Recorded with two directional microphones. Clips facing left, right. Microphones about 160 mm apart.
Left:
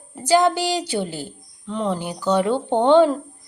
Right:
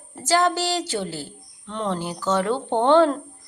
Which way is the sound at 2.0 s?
15° left (ahead or behind).